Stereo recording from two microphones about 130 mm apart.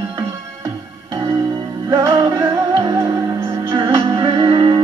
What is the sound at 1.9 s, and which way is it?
Music, 25° right (ahead or behind).